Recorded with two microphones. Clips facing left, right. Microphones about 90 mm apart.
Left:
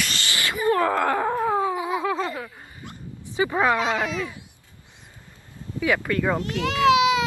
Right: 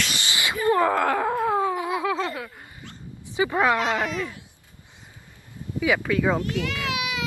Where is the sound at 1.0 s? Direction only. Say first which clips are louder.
Even; 5° left (ahead or behind).